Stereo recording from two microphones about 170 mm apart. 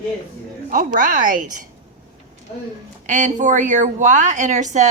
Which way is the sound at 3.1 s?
45° right (ahead or behind).